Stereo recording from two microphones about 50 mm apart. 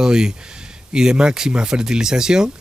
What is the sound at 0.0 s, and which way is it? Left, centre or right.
Speech, centre.